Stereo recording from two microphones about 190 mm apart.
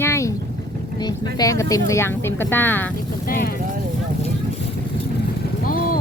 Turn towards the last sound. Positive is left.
turn(degrees=45)  # may be behind; listen again after turning